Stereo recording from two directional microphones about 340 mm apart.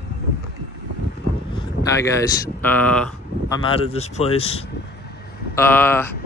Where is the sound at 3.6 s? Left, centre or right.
Centre.